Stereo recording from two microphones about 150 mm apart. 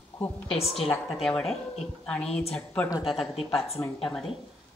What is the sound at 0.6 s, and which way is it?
Speech, 40° left (ahead or behind).